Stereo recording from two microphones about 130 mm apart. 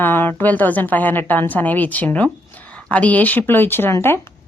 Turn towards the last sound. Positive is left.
turn(degrees=20)  # may be behind; listen again after turning